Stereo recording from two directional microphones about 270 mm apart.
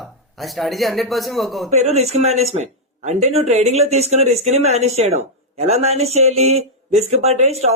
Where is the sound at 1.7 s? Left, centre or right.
Right.